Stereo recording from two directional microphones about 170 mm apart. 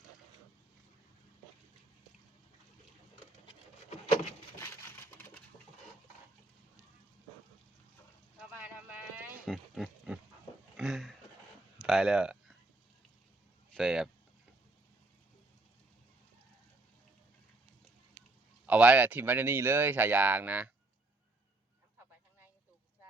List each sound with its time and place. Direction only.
3.4 s a sound: 30° left (ahead or behind)
8.4 s clip-clop: 5° right (ahead or behind)
9.5 s pig: centre (ahead or behind)
10.8 s a sound: centre (ahead or behind)
11.8 s speech: centre (ahead or behind)
13.7 s vehicle: 5° right (ahead or behind)
18.6 s speech: 10° right (ahead or behind)